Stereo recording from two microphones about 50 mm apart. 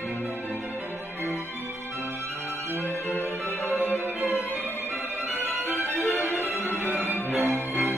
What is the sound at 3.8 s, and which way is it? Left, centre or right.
Violin, left.